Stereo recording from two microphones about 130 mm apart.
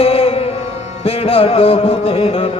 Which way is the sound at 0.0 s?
50° left (ahead or behind).